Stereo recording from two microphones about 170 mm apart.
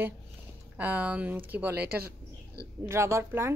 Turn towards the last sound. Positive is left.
turn(degrees=-15)  # may be behind; listen again after turning